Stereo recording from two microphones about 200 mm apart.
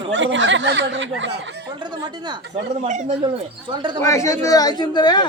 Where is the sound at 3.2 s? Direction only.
25° right (ahead or behind).